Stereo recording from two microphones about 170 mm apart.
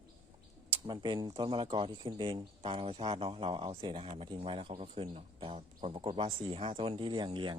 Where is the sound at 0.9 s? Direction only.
30° right (ahead or behind).